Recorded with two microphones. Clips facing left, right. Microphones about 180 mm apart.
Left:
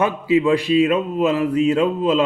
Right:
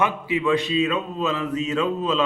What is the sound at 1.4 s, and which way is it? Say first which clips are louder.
Speech: left 6 dB; 30° left (ahead or behind).